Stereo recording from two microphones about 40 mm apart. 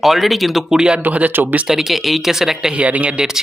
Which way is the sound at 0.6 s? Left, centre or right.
Centre.